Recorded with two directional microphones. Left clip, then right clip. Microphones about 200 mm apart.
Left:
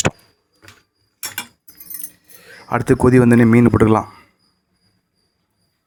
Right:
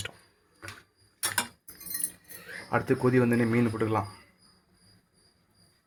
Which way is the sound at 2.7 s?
35° left (ahead or behind).